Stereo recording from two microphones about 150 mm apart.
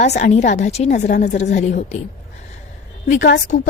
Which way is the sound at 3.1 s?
90° left.